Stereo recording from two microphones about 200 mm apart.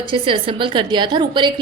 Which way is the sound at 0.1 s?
25° right (ahead or behind).